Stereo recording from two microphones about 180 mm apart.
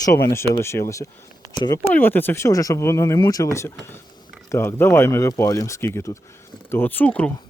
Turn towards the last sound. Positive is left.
turn(degrees=5)  # may be behind; listen again after turning